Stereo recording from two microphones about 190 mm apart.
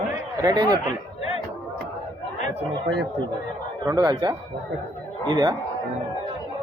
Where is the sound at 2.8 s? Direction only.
60° right (ahead or behind).